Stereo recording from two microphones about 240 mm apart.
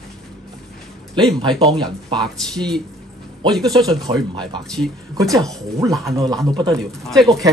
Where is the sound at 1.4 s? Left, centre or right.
Centre.